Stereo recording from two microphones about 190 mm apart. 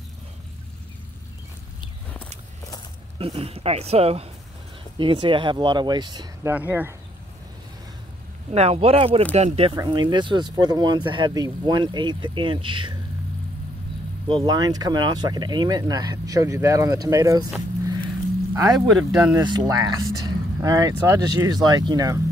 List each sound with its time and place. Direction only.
3.2 s speech: 30° right (ahead or behind)
6.5 s speech: 10° right (ahead or behind)
8.5 s speech: 30° right (ahead or behind)
9.7 s speech: 20° right (ahead or behind)
14.2 s speech: 25° right (ahead or behind)
18.5 s speech: 15° right (ahead or behind)
18.9 s speech: 5° right (ahead or behind)
19.4 s speech: 20° right (ahead or behind)